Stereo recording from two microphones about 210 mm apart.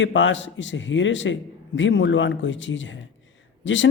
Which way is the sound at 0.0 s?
60° left (ahead or behind).